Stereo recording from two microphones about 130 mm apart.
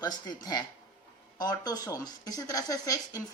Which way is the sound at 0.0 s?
30° left (ahead or behind).